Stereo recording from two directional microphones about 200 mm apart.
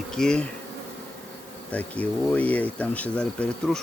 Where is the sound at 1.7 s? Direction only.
5° left (ahead or behind).